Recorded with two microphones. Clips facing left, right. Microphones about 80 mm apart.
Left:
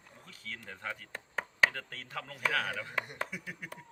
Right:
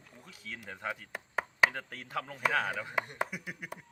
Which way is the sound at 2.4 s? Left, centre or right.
Centre.